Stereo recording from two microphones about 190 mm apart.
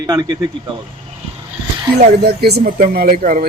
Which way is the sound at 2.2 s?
55° right (ahead or behind).